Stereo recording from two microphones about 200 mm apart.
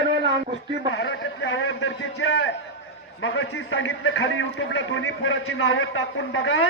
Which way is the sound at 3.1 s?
65° left (ahead or behind).